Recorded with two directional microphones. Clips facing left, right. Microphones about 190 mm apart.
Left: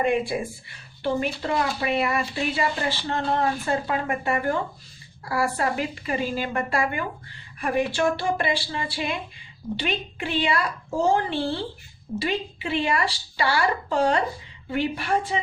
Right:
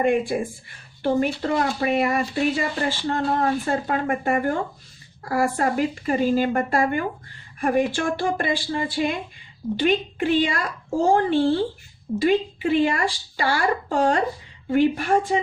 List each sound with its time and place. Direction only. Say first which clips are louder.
0.0 s speech: right 3 dB; 45° right (ahead or behind)